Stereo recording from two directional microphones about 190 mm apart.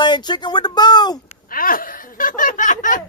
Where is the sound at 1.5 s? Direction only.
50° left (ahead or behind).